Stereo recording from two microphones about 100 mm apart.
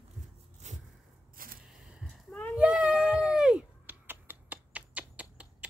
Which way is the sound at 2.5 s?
15° right (ahead or behind).